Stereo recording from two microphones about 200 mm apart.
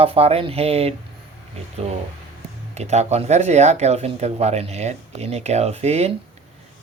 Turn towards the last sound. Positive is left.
turn(degrees=-35)  # may be behind; listen again after turning